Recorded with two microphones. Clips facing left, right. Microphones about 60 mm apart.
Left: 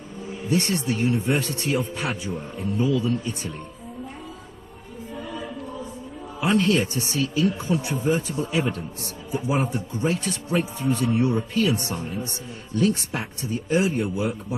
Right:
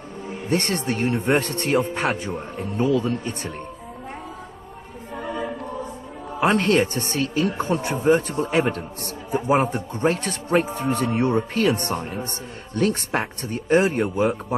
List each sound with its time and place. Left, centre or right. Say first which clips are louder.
0.5 s speech: right 1 dB; right
5.1 s choir: right 5 dB; right
6.4 s speech: right 2 dB; right